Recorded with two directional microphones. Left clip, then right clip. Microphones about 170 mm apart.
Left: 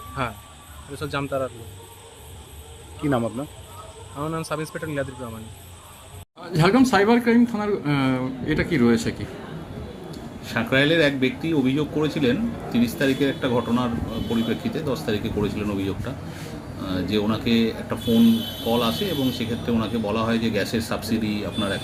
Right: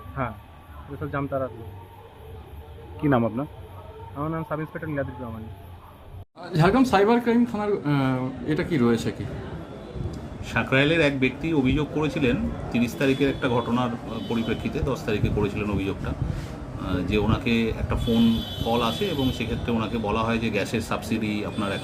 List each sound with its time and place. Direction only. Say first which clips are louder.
1.0 s speech: left 2 dB; 45° left (ahead or behind)
3.0 s speech: right 1 dB; 10° left (ahead or behind)
4.2 s speech: left 2 dB; 50° left (ahead or behind)
6.4 s speech: left 2 dB; 5° right (ahead or behind)
10.5 s speech: left 2 dB; 5° right (ahead or behind)